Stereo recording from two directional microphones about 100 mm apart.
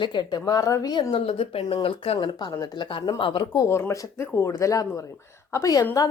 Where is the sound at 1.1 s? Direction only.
65° left (ahead or behind).